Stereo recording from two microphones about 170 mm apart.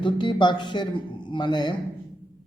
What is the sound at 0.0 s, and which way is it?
A man's voice, 25° left (ahead or behind).